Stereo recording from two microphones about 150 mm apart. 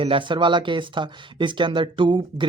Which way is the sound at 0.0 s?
35° right (ahead or behind).